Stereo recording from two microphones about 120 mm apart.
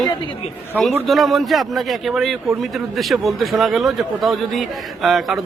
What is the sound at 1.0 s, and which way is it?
A man's voice, centre (ahead or behind).